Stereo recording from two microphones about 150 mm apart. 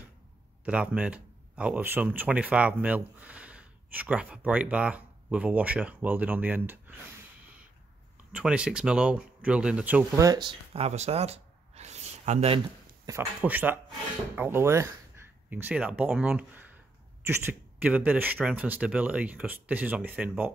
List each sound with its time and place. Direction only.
0.7 s speech: 10° right (ahead or behind)
8.3 s speech: 5° right (ahead or behind)
10.1 s speech: 25° right (ahead or behind)
10.7 s a sound: 45° right (ahead or behind)
13.0 s speech: 20° right (ahead or behind)